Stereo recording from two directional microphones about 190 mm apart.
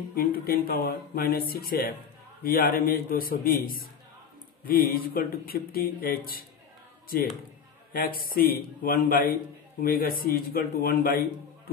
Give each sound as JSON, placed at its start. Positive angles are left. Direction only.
{"t": 0.1, "sound": "speech", "side_deg": 50}
{"t": 8.3, "sound": "speech", "side_deg": 50}